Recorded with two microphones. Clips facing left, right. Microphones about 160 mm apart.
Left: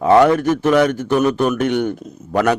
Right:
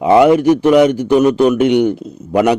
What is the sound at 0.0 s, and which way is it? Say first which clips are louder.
A man's voice: right 3 dB; 15° right (ahead or behind).